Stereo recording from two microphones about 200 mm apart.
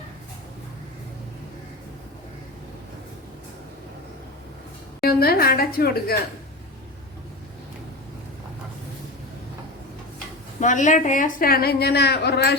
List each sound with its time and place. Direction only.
5.0 s a woman's voice: 50° left (ahead or behind)
10.6 s a woman's voice: 40° left (ahead or behind); by 12.5 s 55° left (ahead or behind)